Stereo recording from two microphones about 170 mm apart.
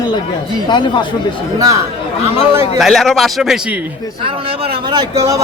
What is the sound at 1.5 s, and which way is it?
Speech, 20° right (ahead or behind).